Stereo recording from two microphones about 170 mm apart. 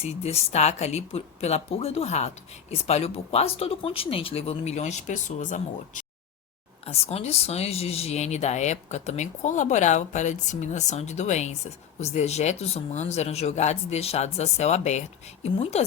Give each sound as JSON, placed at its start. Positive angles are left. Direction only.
{"t": 0.0, "sound": "speech", "side_deg": 40}
{"t": 6.8, "sound": "speech", "side_deg": 35}